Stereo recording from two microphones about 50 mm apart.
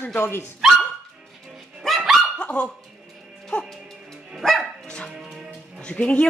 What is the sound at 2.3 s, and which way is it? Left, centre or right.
Dog, left.